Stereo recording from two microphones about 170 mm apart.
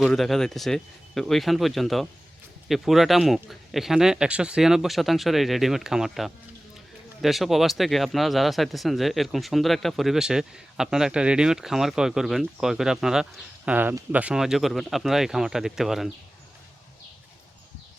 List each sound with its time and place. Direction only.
0.0 s speech: centre (ahead or behind)